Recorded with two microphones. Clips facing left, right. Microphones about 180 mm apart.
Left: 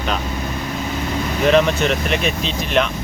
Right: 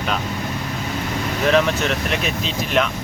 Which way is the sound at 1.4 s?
Centre (ahead or behind).